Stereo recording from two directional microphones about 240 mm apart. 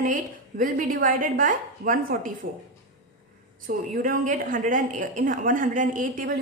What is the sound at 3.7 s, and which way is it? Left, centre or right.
A woman's voice, right.